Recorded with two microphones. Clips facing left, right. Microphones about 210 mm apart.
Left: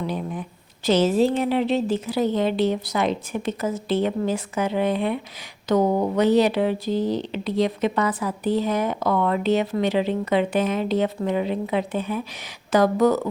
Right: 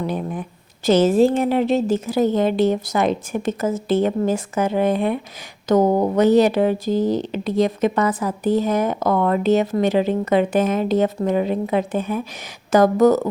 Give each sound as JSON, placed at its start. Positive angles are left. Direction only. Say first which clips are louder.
{"t": 0.0, "sound": "speech", "louder": "right 3 dB", "side_deg": -50}